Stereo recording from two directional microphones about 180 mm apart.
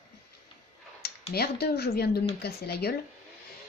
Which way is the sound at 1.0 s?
60° left (ahead or behind).